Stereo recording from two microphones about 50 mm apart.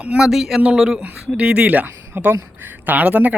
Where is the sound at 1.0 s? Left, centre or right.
Right.